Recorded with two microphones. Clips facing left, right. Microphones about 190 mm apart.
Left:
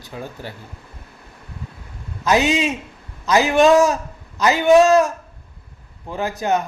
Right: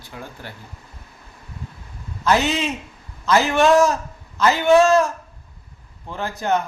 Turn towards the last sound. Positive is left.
turn(degrees=15)  # may be behind; listen again after turning